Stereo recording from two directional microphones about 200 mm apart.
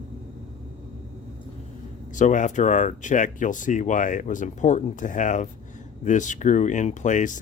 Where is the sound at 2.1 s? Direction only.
40° left (ahead or behind).